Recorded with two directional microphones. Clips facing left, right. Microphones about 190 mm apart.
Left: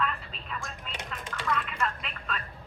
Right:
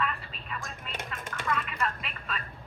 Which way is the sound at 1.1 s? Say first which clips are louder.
Even; 50° right (ahead or behind).